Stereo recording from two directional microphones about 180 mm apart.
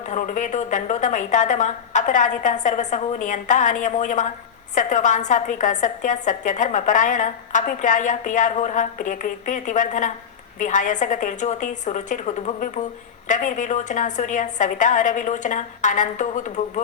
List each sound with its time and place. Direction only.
0.1 s a woman's voice: 45° left (ahead or behind)